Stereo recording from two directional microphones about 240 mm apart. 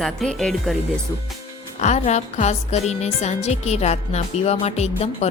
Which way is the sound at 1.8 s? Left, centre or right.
Left.